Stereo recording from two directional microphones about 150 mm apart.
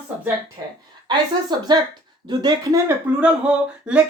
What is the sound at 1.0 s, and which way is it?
A woman's voice, 30° right (ahead or behind).